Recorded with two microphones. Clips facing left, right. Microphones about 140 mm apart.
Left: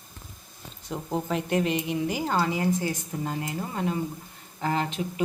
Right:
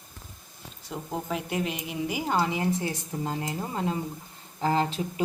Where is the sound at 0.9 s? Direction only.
Centre (ahead or behind).